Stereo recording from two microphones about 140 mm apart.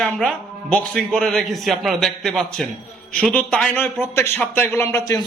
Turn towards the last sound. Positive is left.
turn(degrees=15)  # may be behind; listen again after turning